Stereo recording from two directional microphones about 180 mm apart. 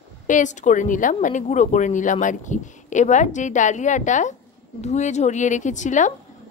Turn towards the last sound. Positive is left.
turn(degrees=45)  # may be behind; listen again after turning